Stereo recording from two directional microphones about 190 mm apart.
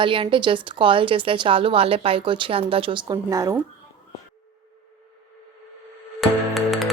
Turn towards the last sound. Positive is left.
turn(degrees=0)  # may be behind; listen again after turning